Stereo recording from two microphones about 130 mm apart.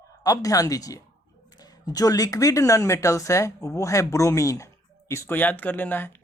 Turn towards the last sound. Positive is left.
turn(degrees=15)  # may be behind; listen again after turning